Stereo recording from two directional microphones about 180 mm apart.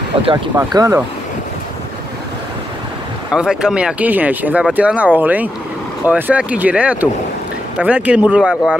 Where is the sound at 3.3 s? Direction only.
5° right (ahead or behind).